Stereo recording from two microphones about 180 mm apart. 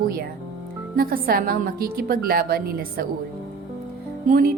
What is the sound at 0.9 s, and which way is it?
A woman's voice, 55° right (ahead or behind).